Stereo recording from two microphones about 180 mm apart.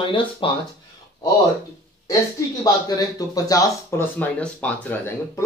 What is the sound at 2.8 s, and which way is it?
Speech, 20° left (ahead or behind).